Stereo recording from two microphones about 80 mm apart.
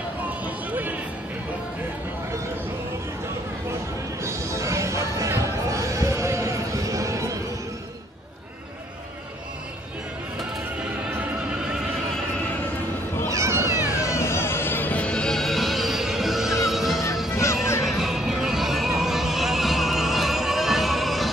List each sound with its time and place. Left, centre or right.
0.7 s music: right
4.2 s music: right
5.4 s a sound: right
13.3 s cat: right
14.0 s music: left; by 21.3 s centre